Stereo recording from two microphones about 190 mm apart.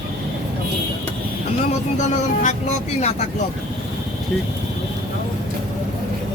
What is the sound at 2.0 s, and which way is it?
Speech, 40° left (ahead or behind).